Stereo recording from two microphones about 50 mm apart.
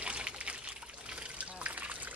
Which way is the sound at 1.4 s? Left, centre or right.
Right.